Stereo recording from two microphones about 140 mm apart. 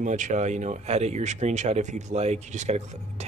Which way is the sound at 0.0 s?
60° right (ahead or behind).